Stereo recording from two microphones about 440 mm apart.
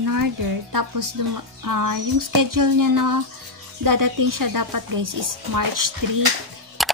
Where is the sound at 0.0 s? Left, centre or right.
Right.